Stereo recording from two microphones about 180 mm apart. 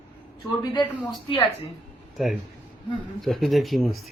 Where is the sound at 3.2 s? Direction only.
Centre (ahead or behind).